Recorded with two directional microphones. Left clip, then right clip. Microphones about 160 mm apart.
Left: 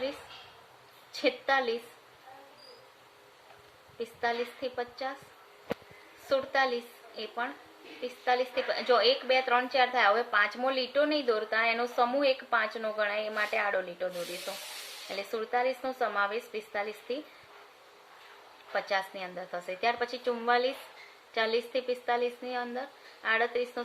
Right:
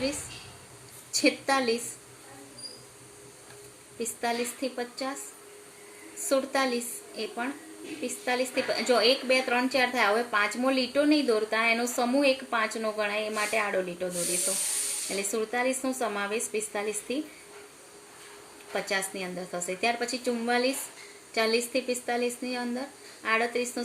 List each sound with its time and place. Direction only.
1.2 s speech: 45° left (ahead or behind)
3.9 s speech: 45° left (ahead or behind)
6.2 s speech: 45° left (ahead or behind)
15.1 s speech: 45° left (ahead or behind)
18.7 s speech: 45° left (ahead or behind)